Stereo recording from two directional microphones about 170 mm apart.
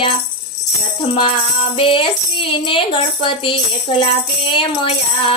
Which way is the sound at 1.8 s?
30° left (ahead or behind).